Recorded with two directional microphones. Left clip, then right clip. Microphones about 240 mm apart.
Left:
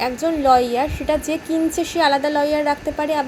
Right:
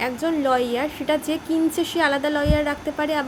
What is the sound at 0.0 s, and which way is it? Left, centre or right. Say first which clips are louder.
A woman's voice: left 4 dB; centre.